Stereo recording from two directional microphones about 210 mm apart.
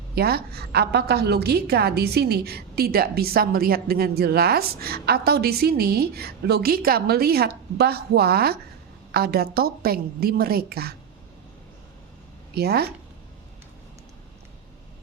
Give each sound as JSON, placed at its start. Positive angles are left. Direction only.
{"t": 0.2, "sound": "a woman's voice", "side_deg": -50}
{"t": 12.5, "sound": "a woman's voice", "side_deg": -50}